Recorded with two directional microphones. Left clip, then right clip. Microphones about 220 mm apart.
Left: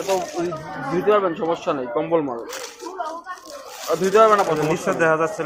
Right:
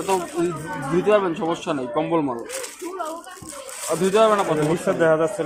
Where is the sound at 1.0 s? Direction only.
45° right (ahead or behind).